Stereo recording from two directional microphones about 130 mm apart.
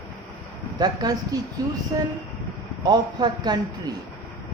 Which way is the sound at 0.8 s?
30° right (ahead or behind).